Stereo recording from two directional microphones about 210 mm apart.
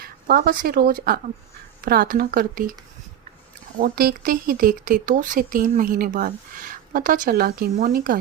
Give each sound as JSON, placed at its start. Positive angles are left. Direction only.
{"t": 0.0, "sound": "a woman's voice", "side_deg": -45}
{"t": 3.8, "sound": "speech", "side_deg": -45}